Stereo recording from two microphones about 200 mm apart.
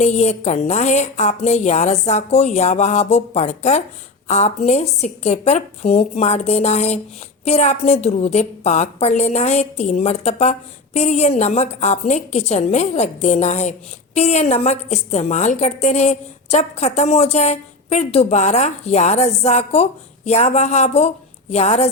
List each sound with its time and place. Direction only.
0.0 s a woman's voice: 35° left (ahead or behind)